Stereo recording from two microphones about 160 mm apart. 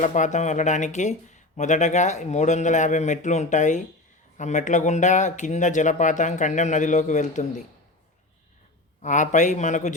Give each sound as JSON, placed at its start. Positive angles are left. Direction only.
{"t": 0.0, "sound": "speech", "side_deg": 50}
{"t": 9.0, "sound": "speech", "side_deg": 50}